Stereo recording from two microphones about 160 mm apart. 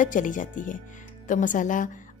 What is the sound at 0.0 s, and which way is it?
Speech, 55° left (ahead or behind).